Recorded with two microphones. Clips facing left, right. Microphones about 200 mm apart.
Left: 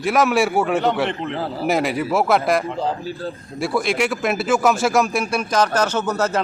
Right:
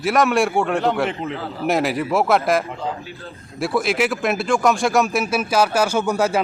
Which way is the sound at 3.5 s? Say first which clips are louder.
Right 1 dB; centre (ahead or behind).